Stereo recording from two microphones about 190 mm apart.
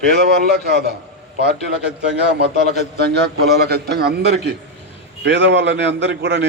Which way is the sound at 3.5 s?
55° right (ahead or behind).